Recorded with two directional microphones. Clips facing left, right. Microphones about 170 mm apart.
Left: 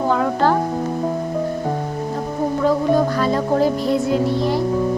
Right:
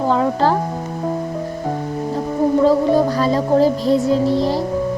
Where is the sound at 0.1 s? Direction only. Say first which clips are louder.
Right 1 dB; 30° right (ahead or behind).